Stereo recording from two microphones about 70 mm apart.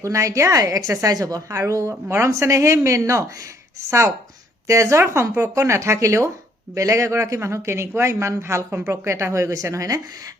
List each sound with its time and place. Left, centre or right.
0.0 s a woman's voice: right